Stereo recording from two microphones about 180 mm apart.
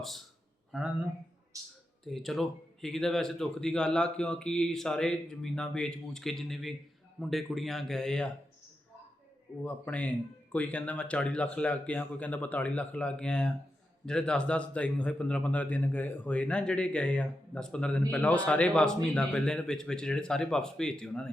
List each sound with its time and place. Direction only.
1.5 s a sound: 20° right (ahead or behind)
2.0 s a man's voice: centre (ahead or behind)
9.6 s a man's voice: 10° left (ahead or behind)